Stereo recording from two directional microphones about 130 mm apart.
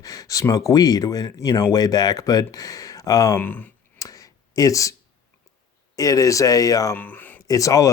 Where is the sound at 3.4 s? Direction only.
15° left (ahead or behind).